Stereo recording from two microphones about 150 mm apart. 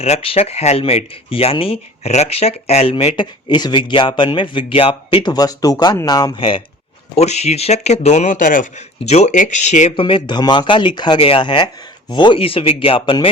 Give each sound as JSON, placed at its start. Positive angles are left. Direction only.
{"t": 0.0, "sound": "speech", "side_deg": 40}
{"t": 3.2, "sound": "speech", "side_deg": 30}
{"t": 7.2, "sound": "speech", "side_deg": 45}
{"t": 9.0, "sound": "speech", "side_deg": 50}
{"t": 9.9, "sound": "speech", "side_deg": 35}